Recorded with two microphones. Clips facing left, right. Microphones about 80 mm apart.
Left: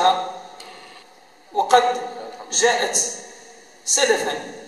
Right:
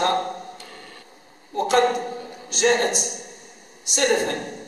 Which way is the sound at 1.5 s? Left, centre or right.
Left.